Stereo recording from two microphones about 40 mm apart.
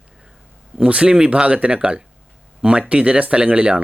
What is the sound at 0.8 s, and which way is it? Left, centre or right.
Speech, right.